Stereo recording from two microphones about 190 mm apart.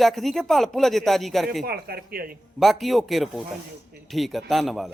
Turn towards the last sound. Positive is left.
turn(degrees=0)  # may be behind; listen again after turning